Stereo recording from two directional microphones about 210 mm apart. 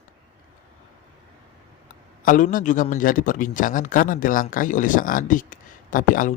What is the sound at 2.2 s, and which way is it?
A man's voice, 40° left (ahead or behind).